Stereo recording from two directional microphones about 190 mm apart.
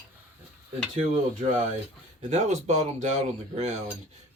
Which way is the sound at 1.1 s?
40° right (ahead or behind).